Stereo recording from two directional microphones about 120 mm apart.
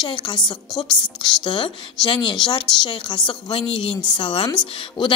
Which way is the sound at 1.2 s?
40° left (ahead or behind).